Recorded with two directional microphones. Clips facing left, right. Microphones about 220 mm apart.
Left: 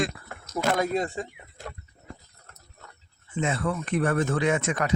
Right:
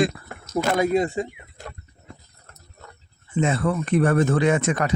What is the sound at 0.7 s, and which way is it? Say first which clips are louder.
Speech: right 6 dB; 5° right (ahead or behind).